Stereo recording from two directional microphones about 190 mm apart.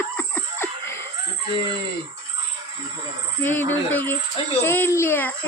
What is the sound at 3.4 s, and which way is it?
A child's voice, 10° left (ahead or behind).